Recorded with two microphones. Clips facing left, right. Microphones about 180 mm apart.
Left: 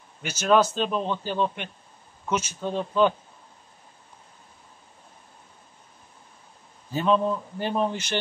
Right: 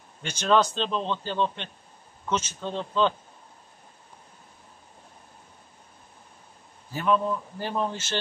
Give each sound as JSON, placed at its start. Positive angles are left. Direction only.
{"t": 0.2, "sound": "a man's voice", "side_deg": 5}
{"t": 6.9, "sound": "a man's voice", "side_deg": 20}